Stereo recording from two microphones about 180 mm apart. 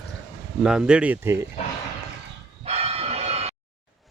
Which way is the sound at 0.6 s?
5° right (ahead or behind).